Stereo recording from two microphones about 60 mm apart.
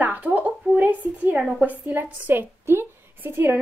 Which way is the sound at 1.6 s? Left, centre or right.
Right.